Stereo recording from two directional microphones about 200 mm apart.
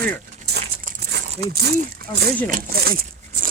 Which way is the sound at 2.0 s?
50° right (ahead or behind).